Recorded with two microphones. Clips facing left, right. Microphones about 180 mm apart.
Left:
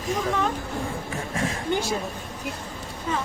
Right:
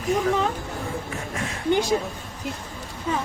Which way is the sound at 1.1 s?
35° left (ahead or behind).